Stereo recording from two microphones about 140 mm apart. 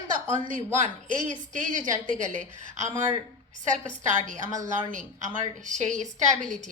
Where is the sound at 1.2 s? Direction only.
65° right (ahead or behind).